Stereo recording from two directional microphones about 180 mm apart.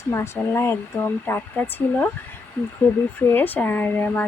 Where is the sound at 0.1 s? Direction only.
15° left (ahead or behind).